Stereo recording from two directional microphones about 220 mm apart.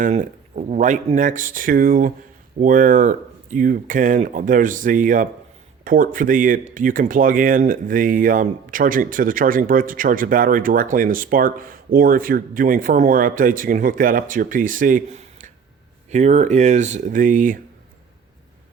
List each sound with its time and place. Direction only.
0.0 s speech: 35° right (ahead or behind)